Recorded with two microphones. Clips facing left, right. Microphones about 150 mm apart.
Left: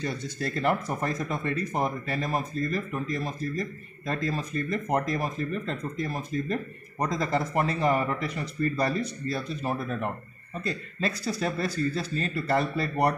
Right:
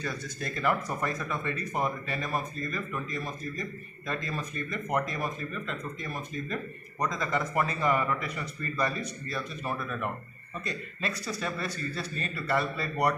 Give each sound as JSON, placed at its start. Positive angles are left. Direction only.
{"t": 0.0, "sound": "speech", "side_deg": 30}